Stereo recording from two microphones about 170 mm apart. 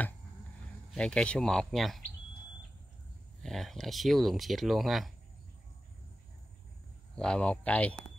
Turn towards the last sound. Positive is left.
turn(degrees=10)  # may be behind; listen again after turning